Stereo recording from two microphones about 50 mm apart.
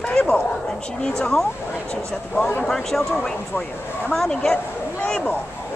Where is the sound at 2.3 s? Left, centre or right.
Left.